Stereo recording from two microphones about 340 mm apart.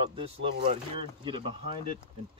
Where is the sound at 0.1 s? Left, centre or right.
Centre.